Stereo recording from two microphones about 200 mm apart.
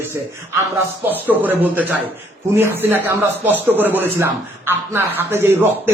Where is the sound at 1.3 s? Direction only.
10° right (ahead or behind).